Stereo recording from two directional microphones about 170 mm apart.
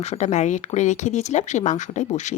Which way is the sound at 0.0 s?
40° left (ahead or behind).